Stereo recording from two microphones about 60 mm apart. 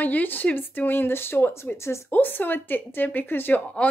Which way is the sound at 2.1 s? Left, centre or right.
Left.